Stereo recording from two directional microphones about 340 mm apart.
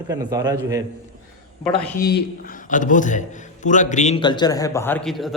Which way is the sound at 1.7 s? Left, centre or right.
Centre.